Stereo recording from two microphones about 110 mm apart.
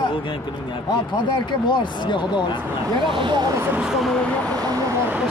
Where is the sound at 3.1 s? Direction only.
45° right (ahead or behind).